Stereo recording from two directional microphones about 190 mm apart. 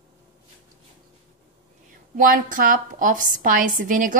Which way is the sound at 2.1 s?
45° right (ahead or behind).